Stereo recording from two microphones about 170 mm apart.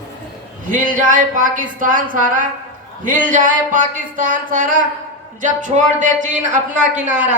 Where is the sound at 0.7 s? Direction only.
50° right (ahead or behind).